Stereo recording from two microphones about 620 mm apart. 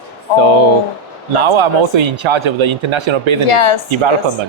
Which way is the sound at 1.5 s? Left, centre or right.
Right.